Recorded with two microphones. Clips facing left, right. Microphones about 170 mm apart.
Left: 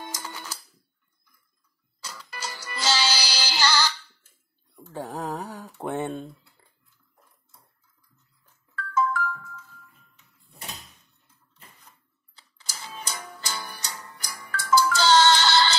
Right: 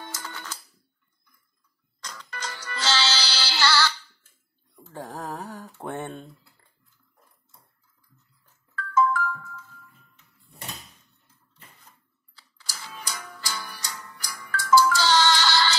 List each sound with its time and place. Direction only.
0.0 s music: 10° left (ahead or behind)
2.0 s music: 5° left (ahead or behind)
4.9 s a sound: 5° left (ahead or behind)
5.9 s typing: 10° left (ahead or behind)
8.9 s music: 50° right (ahead or behind)
12.4 s music: 20° left (ahead or behind)